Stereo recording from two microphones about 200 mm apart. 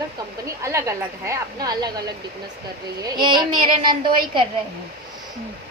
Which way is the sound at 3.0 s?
25° right (ahead or behind).